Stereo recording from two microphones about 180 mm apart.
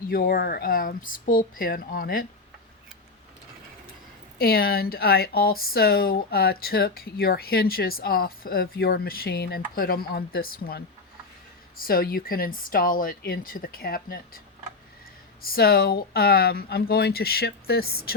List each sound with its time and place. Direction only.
0.1 s speech: 55° left (ahead or behind)
4.4 s speech: 55° left (ahead or behind)